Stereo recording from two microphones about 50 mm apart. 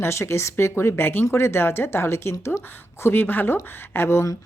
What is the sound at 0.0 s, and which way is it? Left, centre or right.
Speech, left.